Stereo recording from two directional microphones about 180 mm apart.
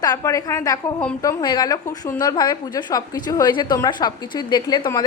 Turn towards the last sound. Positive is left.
turn(degrees=20)  # may be behind; listen again after turning